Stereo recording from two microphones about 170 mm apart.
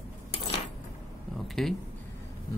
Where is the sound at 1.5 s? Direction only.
Centre (ahead or behind).